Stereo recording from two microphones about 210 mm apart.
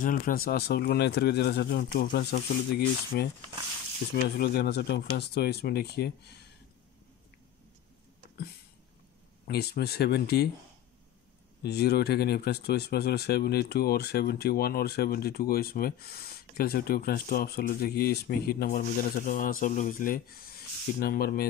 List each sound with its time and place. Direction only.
0.0 s speech: 40° left (ahead or behind)
4.4 s speech: 50° left (ahead or behind)
9.5 s speech: 50° left (ahead or behind)
11.6 s speech: 50° left (ahead or behind)